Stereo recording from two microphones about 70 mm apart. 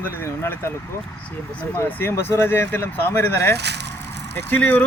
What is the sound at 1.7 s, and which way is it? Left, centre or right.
Speech, left.